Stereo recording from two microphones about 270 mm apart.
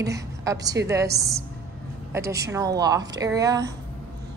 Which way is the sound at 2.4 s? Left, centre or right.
Centre.